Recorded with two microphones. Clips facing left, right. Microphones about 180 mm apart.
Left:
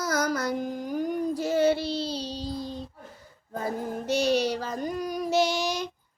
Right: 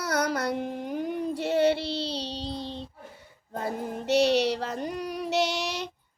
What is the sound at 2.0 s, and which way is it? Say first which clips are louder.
Child singing: left 1 dB; 30° right (ahead or behind).